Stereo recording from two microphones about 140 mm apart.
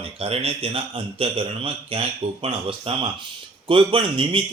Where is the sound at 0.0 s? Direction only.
45° right (ahead or behind).